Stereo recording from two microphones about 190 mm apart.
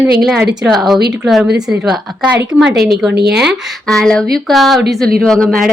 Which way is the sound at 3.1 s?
60° right (ahead or behind).